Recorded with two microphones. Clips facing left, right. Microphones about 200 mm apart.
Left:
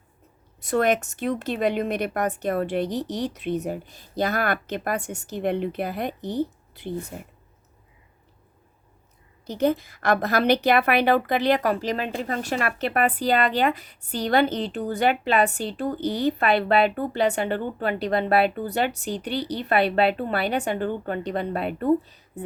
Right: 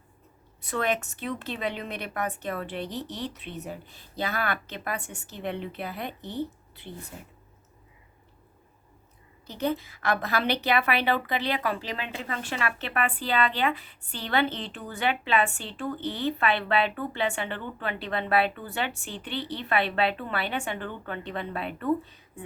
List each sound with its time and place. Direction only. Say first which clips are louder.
0.6 s a woman's voice: left 7 dB; 45° left (ahead or behind)
7.1 s speech: left 6 dB; 55° left (ahead or behind)
9.5 s a woman's voice: left 6 dB; 45° left (ahead or behind)